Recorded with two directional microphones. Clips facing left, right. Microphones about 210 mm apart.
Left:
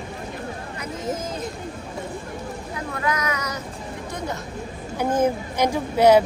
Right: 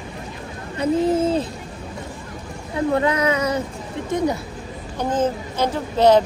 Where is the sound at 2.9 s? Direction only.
30° right (ahead or behind).